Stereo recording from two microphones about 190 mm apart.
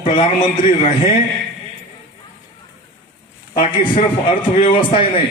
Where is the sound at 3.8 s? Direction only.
45° left (ahead or behind).